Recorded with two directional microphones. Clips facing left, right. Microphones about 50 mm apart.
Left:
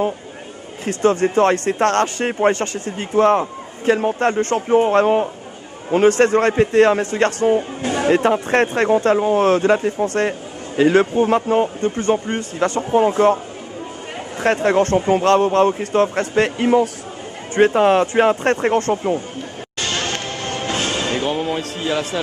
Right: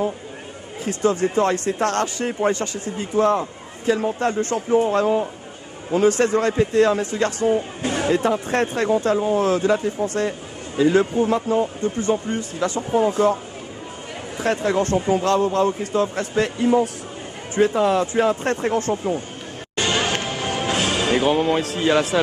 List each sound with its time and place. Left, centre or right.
0.9 s speech: left
14.4 s speech: left
19.7 s music: centre